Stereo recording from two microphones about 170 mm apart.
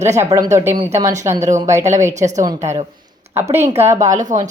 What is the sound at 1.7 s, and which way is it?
Speech, 45° right (ahead or behind).